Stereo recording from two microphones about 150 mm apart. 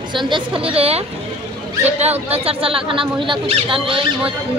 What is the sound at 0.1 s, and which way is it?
Speech, 30° right (ahead or behind).